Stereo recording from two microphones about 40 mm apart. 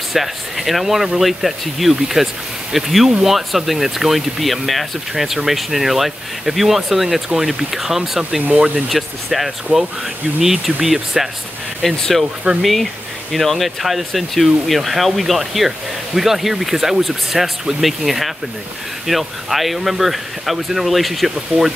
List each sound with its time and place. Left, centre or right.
0.1 s speech: centre
9.7 s speech: right
10.4 s speech: centre
11.8 s speech: centre
12.5 s speech: right
13.3 s speech: centre